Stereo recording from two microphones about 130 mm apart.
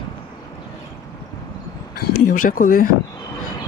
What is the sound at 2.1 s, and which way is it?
Speech, 90° left.